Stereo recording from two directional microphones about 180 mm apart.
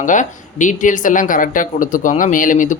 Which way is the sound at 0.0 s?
45° left (ahead or behind).